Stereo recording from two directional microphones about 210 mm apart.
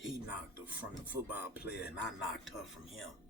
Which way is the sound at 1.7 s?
50° left (ahead or behind).